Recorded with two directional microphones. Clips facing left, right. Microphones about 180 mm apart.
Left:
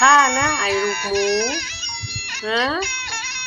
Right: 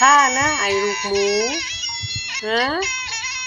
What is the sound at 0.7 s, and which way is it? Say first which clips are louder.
Music: right 2 dB; 55° left (ahead or behind).